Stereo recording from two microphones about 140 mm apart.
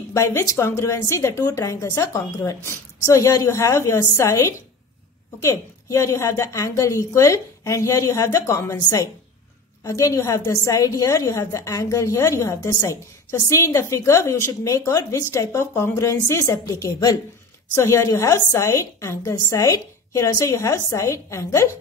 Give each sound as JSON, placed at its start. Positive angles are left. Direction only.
{"t": 0.1, "sound": "a woman's voice", "side_deg": 20}